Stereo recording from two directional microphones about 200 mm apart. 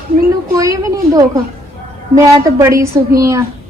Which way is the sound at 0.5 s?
15° right (ahead or behind).